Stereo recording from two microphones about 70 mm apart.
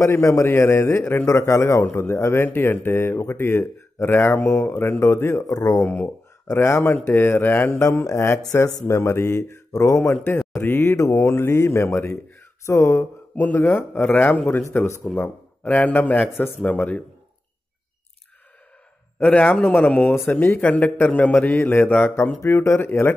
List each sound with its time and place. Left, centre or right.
0.0 s speech: left
5.9 s a man's voice: left
10.6 s speech: left
13.4 s a man's voice: left
19.2 s a man's voice: centre; by 23.1 s left